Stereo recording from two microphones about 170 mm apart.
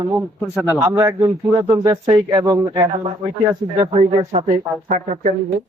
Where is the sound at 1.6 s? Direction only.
25° right (ahead or behind).